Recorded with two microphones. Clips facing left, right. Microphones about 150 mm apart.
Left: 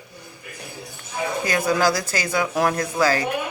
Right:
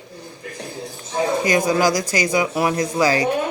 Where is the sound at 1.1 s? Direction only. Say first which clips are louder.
Right 6 dB; 35° right (ahead or behind).